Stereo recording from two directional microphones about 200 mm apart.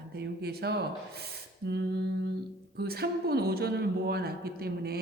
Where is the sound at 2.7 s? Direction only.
50° right (ahead or behind).